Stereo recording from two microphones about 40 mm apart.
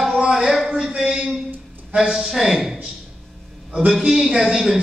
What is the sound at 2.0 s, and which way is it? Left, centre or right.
Speech, centre.